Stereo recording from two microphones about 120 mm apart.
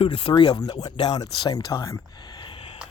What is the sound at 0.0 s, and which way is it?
Speech, 45° left (ahead or behind).